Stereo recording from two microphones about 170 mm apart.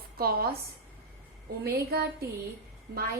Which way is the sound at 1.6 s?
60° right (ahead or behind).